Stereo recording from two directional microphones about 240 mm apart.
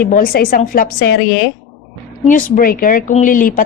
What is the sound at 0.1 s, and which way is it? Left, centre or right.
A woman's voice, left.